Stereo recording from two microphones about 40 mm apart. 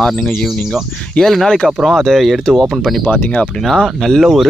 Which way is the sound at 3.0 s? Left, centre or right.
Left.